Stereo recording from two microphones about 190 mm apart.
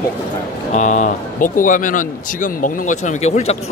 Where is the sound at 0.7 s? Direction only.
40° left (ahead or behind).